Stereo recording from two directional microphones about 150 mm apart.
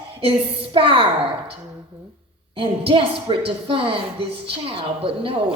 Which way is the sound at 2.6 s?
35° right (ahead or behind).